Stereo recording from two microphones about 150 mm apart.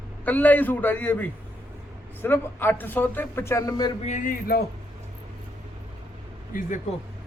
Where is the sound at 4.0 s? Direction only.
55° left (ahead or behind); by 4.6 s 70° left (ahead or behind).